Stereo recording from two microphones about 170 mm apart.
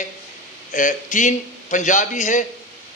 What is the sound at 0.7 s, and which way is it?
A man's voice, 50° left (ahead or behind).